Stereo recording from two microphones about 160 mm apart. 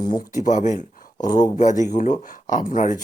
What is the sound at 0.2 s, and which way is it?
Speech, 55° left (ahead or behind).